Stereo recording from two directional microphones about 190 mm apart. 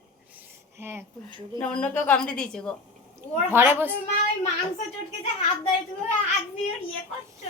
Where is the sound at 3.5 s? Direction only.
10° right (ahead or behind).